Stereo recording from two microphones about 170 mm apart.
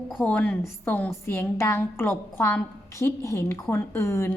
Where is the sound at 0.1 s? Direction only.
5° left (ahead or behind).